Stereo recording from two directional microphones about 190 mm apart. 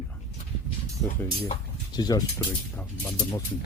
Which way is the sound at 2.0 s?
20° left (ahead or behind).